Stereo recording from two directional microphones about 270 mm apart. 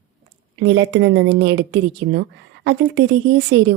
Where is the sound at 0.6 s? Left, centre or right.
Right.